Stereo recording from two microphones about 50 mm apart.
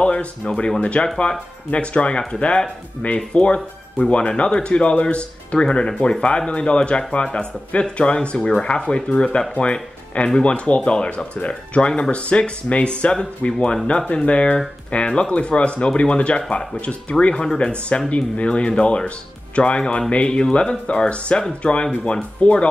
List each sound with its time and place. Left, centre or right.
0.0 s speech: left
3.0 s speech: left